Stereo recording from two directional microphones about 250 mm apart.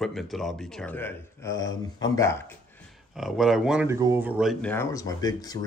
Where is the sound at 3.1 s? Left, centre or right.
Centre.